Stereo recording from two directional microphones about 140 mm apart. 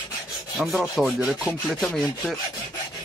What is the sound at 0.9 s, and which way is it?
Rub, centre (ahead or behind).